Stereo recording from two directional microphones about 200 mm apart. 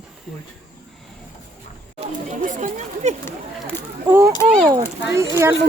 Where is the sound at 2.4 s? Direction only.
40° right (ahead or behind).